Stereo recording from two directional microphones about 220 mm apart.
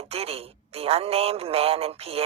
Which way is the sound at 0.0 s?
25° right (ahead or behind).